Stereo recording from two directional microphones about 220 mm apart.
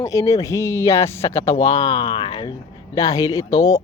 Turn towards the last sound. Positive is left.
turn(degrees=15)  # may be behind; listen again after turning